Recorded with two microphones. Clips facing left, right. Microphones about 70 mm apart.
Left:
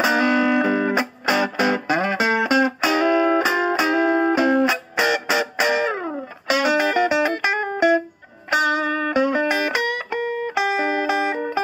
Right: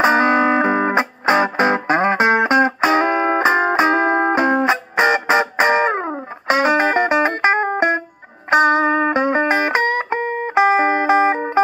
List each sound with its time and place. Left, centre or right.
0.0 s music: right